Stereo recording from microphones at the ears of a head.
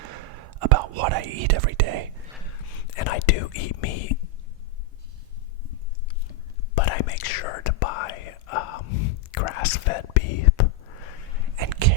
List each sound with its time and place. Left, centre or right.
0.0 s whispering: right
2.5 s whispering: left
5.6 s whispering: left
11.5 s a sound: right